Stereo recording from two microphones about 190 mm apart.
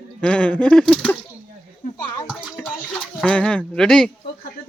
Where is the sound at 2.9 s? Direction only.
5° left (ahead or behind).